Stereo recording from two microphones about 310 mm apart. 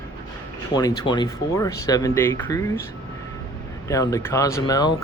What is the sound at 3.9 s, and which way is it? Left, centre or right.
Speech, centre.